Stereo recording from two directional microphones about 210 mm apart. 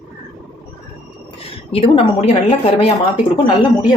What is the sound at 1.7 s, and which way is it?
Speech, 25° left (ahead or behind).